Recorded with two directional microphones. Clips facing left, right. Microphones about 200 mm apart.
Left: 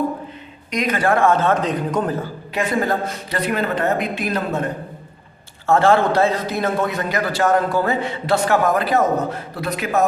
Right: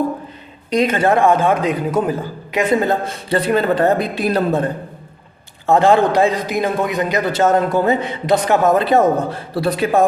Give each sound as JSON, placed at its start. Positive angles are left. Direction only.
{"t": 0.7, "sound": "speech", "side_deg": -30}
{"t": 2.6, "sound": "speech", "side_deg": -25}
{"t": 5.6, "sound": "a man's voice", "side_deg": -15}